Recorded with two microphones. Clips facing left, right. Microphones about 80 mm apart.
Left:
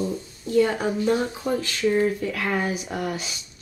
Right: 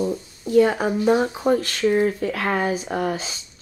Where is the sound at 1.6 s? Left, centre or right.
Right.